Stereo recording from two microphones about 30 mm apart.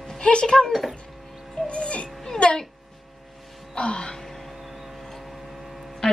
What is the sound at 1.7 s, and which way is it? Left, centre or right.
Music, left.